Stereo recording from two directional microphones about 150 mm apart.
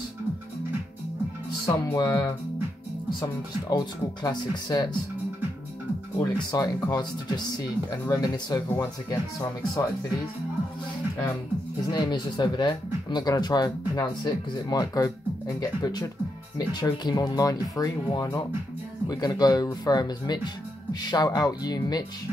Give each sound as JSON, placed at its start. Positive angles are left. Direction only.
{"t": 1.7, "sound": "speech", "side_deg": 25}
{"t": 6.5, "sound": "speech", "side_deg": 25}
{"t": 11.9, "sound": "speech", "side_deg": 30}